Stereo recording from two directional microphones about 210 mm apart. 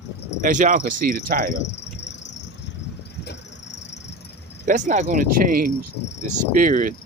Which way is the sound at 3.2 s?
55° left (ahead or behind).